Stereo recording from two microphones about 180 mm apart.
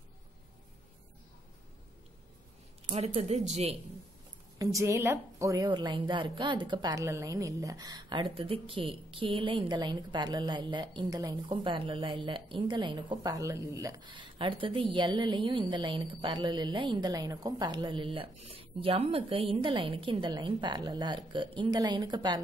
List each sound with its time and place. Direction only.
2.9 s speech: 35° right (ahead or behind)
4.6 s a woman's voice: 15° right (ahead or behind)